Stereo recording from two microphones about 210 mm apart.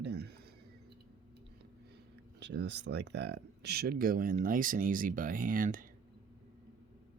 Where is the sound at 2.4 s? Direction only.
55° right (ahead or behind); by 5.9 s 40° right (ahead or behind).